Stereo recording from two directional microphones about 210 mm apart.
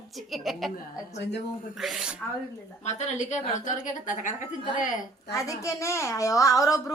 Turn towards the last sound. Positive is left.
turn(degrees=15)  # may be behind; listen again after turning